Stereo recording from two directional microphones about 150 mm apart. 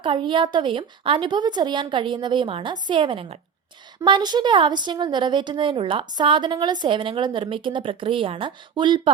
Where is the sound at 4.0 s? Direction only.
30° right (ahead or behind).